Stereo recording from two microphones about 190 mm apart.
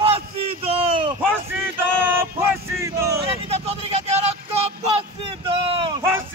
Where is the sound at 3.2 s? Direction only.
30° right (ahead or behind).